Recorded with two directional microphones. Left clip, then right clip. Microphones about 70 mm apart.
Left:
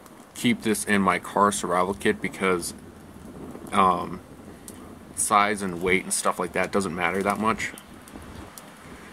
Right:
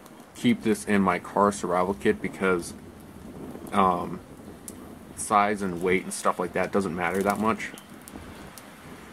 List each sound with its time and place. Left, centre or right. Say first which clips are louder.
0.4 s speech: even; left
3.7 s speech: left 2 dB; left
5.3 s speech: left 1 dB; left